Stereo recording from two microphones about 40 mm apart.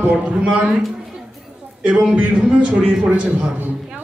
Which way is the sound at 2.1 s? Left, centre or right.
Right.